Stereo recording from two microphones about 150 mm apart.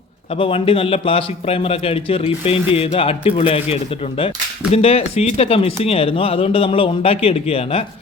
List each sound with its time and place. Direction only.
0.3 s speech: 35° left (ahead or behind)